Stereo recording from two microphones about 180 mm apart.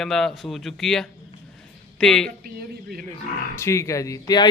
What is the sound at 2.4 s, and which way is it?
Speech, 55° right (ahead or behind).